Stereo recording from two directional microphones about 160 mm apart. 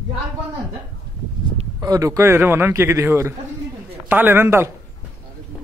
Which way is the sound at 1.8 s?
20° right (ahead or behind).